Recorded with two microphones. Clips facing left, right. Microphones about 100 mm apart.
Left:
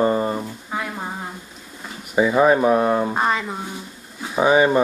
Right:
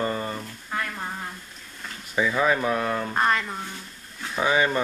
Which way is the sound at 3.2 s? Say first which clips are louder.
Left 2 dB; 10° left (ahead or behind).